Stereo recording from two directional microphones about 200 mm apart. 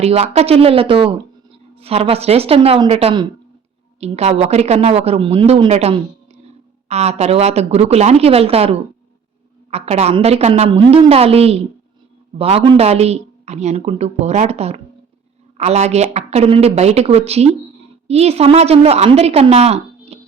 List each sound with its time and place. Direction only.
0.0 s a woman's voice: 30° right (ahead or behind)